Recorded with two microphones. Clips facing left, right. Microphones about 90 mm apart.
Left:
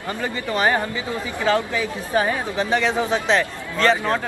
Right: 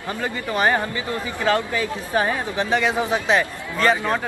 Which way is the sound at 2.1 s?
5° right (ahead or behind).